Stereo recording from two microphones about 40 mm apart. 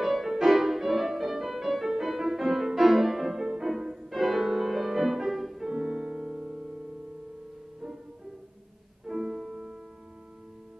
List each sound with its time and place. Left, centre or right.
0.0 s music: centre
5.7 s music: right
9.0 s music: centre